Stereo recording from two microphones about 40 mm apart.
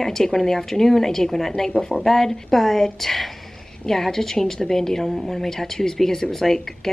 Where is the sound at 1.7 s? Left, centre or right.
Left.